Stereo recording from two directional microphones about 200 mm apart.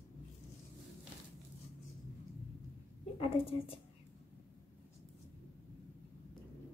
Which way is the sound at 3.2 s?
30° left (ahead or behind).